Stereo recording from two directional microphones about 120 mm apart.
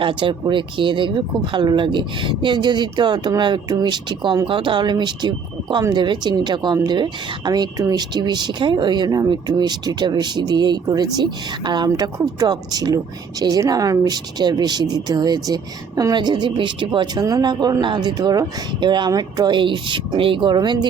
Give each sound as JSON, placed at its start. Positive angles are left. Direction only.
{"t": 0.0, "sound": "speech", "side_deg": -45}